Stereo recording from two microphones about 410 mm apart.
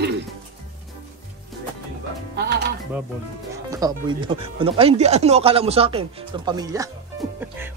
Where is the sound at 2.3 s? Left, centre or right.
Right.